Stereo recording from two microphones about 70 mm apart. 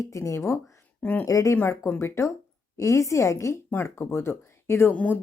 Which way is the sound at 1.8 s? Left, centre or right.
Left.